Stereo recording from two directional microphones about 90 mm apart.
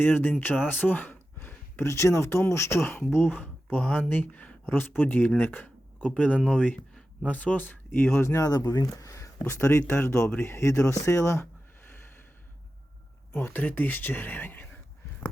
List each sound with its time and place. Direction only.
0.0 s speech: 20° left (ahead or behind)
8.2 s speech: 30° left (ahead or behind)
8.4 s speech: 45° left (ahead or behind); by 11.4 s 30° left (ahead or behind)
13.3 s speech: 20° left (ahead or behind)